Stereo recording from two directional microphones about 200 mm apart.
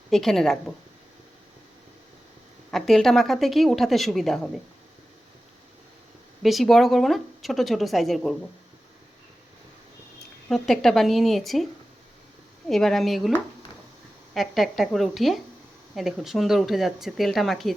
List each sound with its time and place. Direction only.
0.1 s a woman's voice: centre (ahead or behind)
2.7 s a woman's voice: centre (ahead or behind)
6.4 s a woman's voice: centre (ahead or behind)
10.5 s a woman's voice: centre (ahead or behind)